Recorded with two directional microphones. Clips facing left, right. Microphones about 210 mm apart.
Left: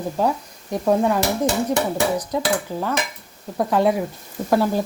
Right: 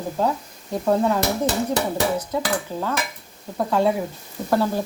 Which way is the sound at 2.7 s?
15° left (ahead or behind).